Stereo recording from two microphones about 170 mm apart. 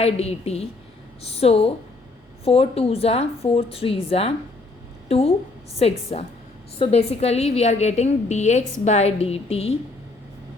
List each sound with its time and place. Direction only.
0.0 s a woman's voice: 35° left (ahead or behind)